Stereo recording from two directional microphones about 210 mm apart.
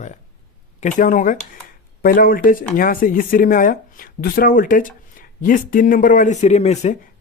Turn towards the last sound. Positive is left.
turn(degrees=30)  # may be behind; listen again after turning